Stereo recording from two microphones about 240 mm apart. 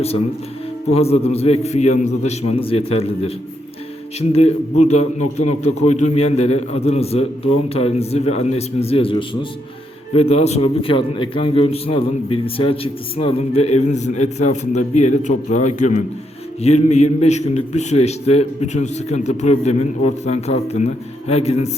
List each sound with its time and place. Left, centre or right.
0.9 s a man's voice: left